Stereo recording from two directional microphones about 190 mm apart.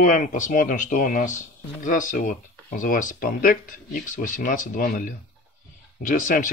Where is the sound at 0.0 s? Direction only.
45° left (ahead or behind).